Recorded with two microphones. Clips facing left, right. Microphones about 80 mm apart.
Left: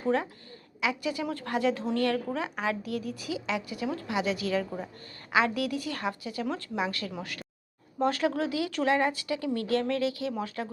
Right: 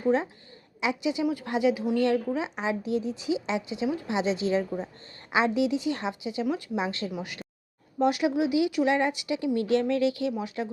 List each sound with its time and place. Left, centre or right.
0.0 s a woman's voice: centre